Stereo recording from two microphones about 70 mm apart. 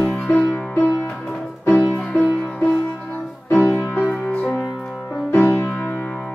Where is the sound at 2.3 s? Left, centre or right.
Centre.